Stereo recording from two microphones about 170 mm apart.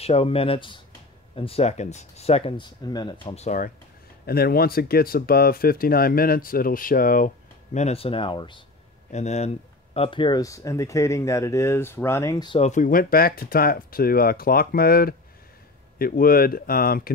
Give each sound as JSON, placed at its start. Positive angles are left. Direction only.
{"t": 0.0, "sound": "speech", "side_deg": 35}
{"t": 3.4, "sound": "speech", "side_deg": 50}
{"t": 4.3, "sound": "speech", "side_deg": 65}
{"t": 9.1, "sound": "speech", "side_deg": 40}
{"t": 9.9, "sound": "speech", "side_deg": 30}
{"t": 12.5, "sound": "speech", "side_deg": 45}